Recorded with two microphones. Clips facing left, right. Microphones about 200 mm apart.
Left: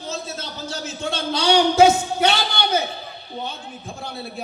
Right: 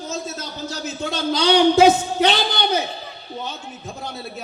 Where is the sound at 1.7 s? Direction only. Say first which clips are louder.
Right 1 dB; 35° right (ahead or behind).